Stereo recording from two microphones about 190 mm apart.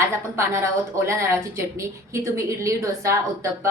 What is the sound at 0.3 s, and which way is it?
A woman's voice, 15° right (ahead or behind).